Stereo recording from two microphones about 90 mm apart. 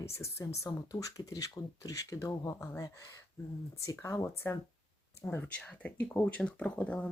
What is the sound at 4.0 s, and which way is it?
Speech, 35° left (ahead or behind).